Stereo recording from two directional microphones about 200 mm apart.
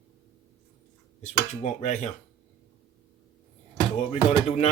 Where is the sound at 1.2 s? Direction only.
35° left (ahead or behind).